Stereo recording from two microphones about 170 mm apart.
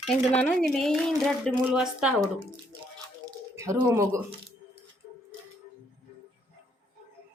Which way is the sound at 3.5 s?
15° right (ahead or behind).